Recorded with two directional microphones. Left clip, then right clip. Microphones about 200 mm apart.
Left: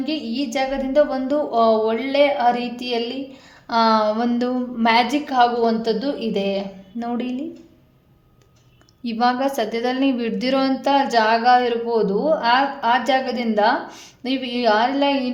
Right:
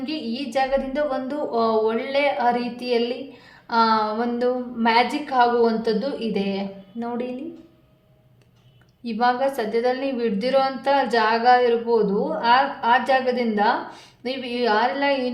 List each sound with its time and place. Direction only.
0.0 s a woman's voice: 35° left (ahead or behind)
9.0 s a woman's voice: 35° left (ahead or behind)